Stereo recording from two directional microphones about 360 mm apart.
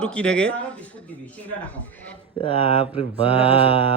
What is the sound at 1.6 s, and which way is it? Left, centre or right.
Speech, centre.